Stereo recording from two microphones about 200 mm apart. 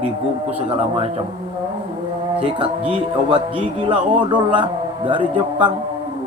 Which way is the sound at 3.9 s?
25° right (ahead or behind).